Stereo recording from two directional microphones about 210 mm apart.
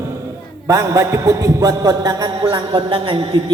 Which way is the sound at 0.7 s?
15° right (ahead or behind).